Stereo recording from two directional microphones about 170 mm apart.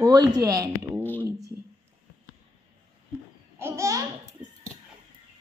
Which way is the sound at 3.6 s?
15° right (ahead or behind).